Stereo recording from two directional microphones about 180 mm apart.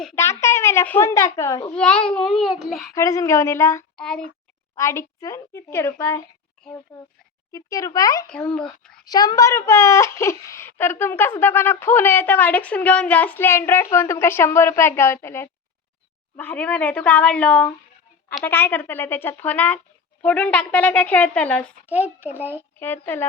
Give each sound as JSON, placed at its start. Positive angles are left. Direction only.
{"t": 0.4, "sound": "speech", "side_deg": 15}
{"t": 1.7, "sound": "speech", "side_deg": 5}
{"t": 2.9, "sound": "speech", "side_deg": 15}
{"t": 3.9, "sound": "a child's voice", "side_deg": 5}
{"t": 4.7, "sound": "a child's voice", "side_deg": 15}
{"t": 8.3, "sound": "speech", "side_deg": 5}
{"t": 8.8, "sound": "a sound", "side_deg": 5}
{"t": 9.0, "sound": "speech", "side_deg": 20}
{"t": 21.8, "sound": "a child's voice", "side_deg": -10}
{"t": 22.8, "sound": "speech", "side_deg": 10}